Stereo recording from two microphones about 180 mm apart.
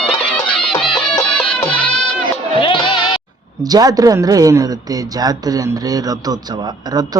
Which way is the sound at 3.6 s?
20° right (ahead or behind).